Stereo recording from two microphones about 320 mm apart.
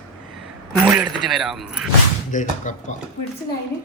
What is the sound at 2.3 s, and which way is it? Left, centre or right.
Speech, left.